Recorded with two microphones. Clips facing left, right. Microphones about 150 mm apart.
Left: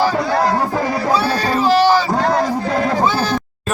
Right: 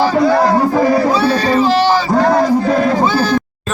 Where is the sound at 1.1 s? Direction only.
10° left (ahead or behind).